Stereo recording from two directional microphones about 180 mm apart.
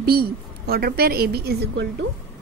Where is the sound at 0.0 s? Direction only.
60° right (ahead or behind).